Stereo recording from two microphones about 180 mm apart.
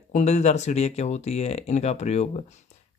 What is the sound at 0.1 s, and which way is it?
Speech, 40° left (ahead or behind).